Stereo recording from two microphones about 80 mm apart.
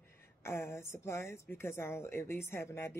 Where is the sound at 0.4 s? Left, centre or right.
Left.